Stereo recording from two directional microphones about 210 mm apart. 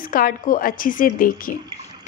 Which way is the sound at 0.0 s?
40° left (ahead or behind).